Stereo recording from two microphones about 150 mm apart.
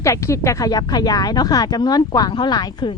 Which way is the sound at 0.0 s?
20° left (ahead or behind).